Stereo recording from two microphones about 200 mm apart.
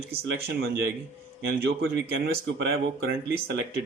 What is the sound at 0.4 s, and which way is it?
Speech, 50° right (ahead or behind).